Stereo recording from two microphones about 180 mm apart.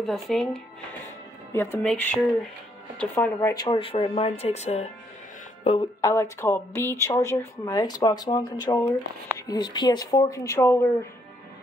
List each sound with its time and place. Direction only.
0.0 s speech: centre (ahead or behind)
1.5 s a woman's voice: 10° left (ahead or behind); by 5.9 s 30° left (ahead or behind)
5.9 s speech: 15° left (ahead or behind)